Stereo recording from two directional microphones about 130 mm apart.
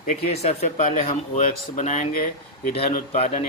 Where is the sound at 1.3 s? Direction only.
60° left (ahead or behind).